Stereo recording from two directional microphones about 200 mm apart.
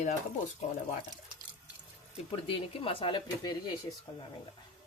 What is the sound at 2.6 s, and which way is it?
Speech, 25° left (ahead or behind).